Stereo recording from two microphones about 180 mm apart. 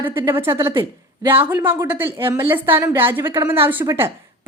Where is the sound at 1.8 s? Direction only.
10° right (ahead or behind).